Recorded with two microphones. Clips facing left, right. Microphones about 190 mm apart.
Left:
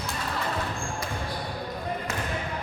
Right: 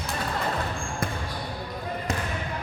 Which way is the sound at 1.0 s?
55° right (ahead or behind).